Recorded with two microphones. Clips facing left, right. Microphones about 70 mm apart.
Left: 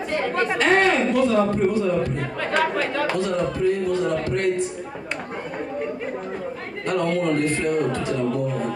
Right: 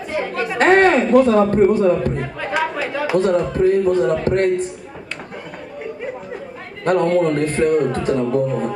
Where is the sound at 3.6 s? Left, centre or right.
Right.